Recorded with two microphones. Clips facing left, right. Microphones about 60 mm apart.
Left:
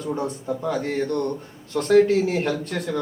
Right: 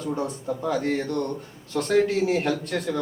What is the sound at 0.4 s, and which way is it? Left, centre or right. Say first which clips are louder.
A woman's voice: right 2 dB; centre.